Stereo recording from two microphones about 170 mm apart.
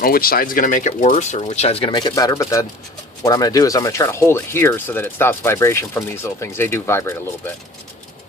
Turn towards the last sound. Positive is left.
turn(degrees=15)  # may be behind; listen again after turning